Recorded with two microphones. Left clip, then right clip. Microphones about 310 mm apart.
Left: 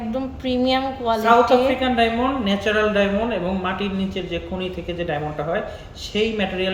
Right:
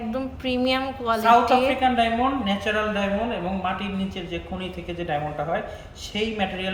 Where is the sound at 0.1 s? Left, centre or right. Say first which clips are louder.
Left 3 dB; centre.